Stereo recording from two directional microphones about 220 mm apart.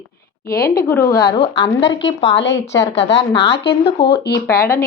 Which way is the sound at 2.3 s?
55° left (ahead or behind).